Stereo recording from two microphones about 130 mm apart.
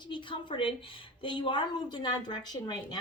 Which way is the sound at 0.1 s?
40° left (ahead or behind).